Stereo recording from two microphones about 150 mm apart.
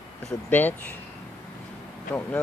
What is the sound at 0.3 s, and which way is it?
Speech, 15° left (ahead or behind).